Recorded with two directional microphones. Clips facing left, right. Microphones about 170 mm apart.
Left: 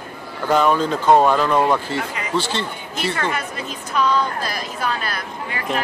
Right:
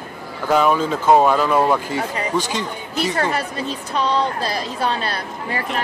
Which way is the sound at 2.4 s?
10° right (ahead or behind).